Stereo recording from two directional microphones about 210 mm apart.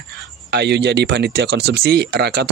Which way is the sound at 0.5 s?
55° right (ahead or behind).